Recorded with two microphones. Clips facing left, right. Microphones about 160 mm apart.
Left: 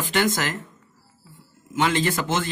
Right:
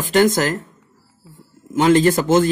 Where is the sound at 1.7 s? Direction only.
40° right (ahead or behind).